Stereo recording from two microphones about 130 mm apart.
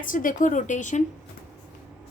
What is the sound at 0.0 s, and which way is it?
A woman's voice, 90° left.